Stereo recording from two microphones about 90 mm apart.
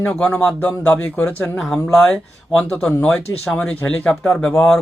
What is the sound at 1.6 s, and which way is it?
Speech, 10° left (ahead or behind).